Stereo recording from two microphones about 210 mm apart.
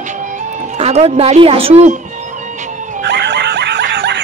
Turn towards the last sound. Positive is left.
turn(degrees=-55)  # may be behind; listen again after turning